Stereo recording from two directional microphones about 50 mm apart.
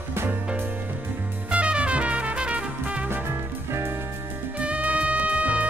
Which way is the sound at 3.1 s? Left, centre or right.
Right.